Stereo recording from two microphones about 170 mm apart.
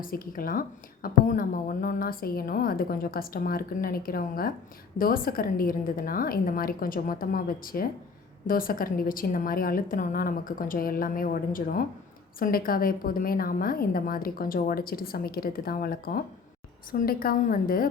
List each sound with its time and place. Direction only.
0.0 s a woman's voice: 55° left (ahead or behind)